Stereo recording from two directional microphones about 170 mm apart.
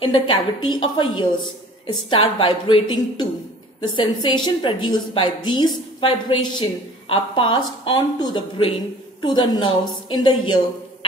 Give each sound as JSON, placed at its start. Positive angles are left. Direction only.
{"t": 0.0, "sound": "a woman's voice", "side_deg": 30}